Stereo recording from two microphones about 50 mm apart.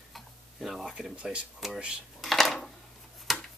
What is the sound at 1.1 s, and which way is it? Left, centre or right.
Speech, right.